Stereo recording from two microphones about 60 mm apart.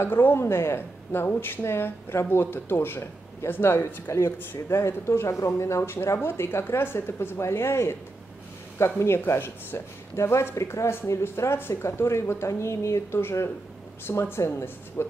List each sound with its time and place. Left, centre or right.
0.0 s speech: left